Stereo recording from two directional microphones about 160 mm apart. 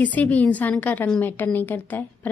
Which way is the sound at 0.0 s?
10° left (ahead or behind).